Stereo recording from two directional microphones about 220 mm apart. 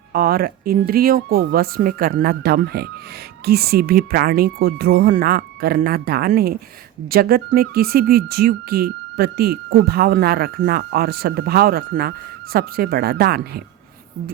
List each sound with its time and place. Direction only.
0.1 s speech: 45° right (ahead or behind)